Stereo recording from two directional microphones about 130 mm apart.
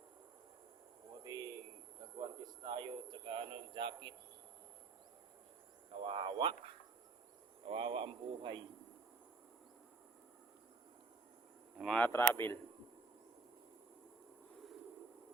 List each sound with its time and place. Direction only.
1.2 s a sound: 30° right (ahead or behind)
2.1 s a man's voice: 35° right (ahead or behind)
6.0 s a man's voice: 40° right (ahead or behind)
7.7 s a man's voice: 40° right (ahead or behind)
11.9 s speech: 15° left (ahead or behind)